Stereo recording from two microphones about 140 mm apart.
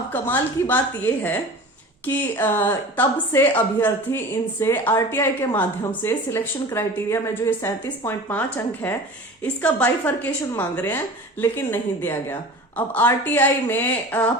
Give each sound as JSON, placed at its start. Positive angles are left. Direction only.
{"t": 0.1, "sound": "a woman's voice", "side_deg": 15}